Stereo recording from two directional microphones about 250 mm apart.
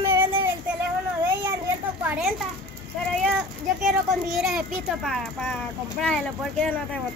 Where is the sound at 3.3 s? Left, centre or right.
Centre.